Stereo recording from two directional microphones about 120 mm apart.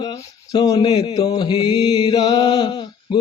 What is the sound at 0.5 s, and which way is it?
Mantra, 35° left (ahead or behind).